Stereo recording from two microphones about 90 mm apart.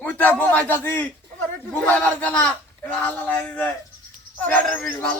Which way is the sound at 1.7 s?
15° left (ahead or behind).